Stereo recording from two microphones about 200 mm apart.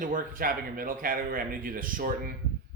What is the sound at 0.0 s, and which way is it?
A man's voice, 40° right (ahead or behind).